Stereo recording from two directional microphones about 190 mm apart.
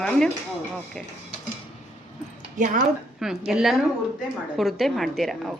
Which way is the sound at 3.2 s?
5° right (ahead or behind).